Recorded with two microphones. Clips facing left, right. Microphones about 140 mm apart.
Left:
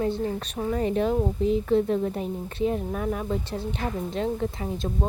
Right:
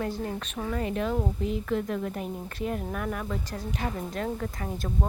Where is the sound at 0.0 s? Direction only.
30° left (ahead or behind).